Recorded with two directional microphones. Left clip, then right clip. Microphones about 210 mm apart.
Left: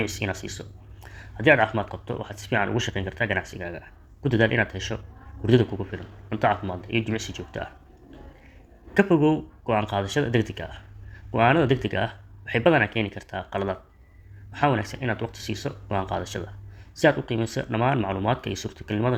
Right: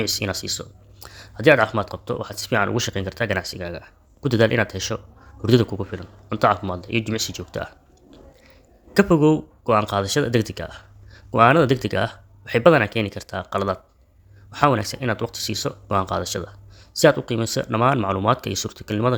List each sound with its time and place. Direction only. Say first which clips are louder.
0.0 s speech: right 5 dB; 60° right (ahead or behind)
8.9 s speech: right 4 dB; 60° right (ahead or behind)